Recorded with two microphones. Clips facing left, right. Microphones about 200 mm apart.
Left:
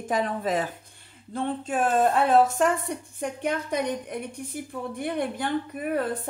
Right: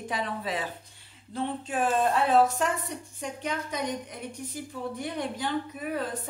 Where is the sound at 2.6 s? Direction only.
55° left (ahead or behind).